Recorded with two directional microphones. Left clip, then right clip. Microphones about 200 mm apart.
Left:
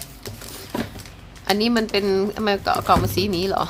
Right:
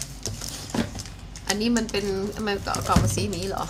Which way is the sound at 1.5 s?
45° left (ahead or behind).